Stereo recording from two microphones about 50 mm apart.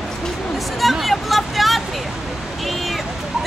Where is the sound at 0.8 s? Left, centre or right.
Centre.